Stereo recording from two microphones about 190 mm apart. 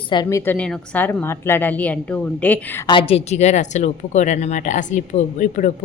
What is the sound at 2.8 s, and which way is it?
A woman's voice, 25° left (ahead or behind).